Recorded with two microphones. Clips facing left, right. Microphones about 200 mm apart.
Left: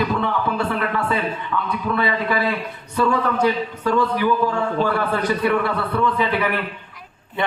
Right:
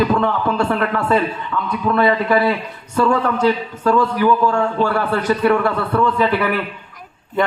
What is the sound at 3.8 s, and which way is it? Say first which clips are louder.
A man's voice: right 4 dB; 45° right (ahead or behind).